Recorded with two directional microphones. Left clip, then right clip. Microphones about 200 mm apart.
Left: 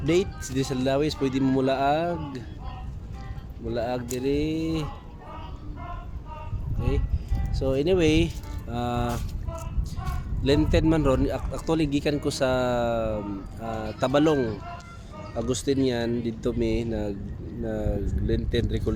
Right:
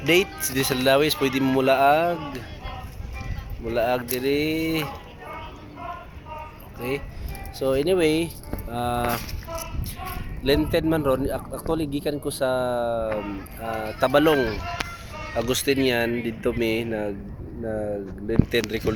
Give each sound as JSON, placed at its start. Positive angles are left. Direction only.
{"t": 0.0, "sound": "speech", "side_deg": 5}
{"t": 3.7, "sound": "speech", "side_deg": -5}
{"t": 6.7, "sound": "speech", "side_deg": -10}
{"t": 10.4, "sound": "speech", "side_deg": 0}